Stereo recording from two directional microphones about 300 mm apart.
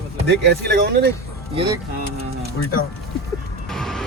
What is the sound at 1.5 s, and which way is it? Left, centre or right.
Speech, centre.